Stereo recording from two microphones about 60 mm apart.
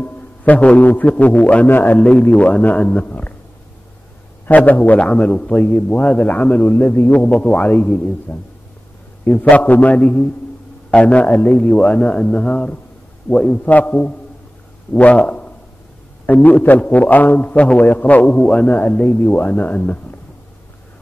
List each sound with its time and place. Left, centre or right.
0.0 s a man's voice: left
4.5 s a man's voice: left